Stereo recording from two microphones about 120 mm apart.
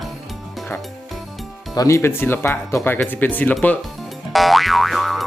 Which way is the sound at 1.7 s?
30° left (ahead or behind).